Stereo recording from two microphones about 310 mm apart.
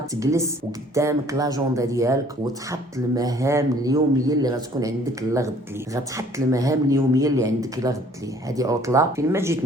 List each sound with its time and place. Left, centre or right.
0.1 s speech: centre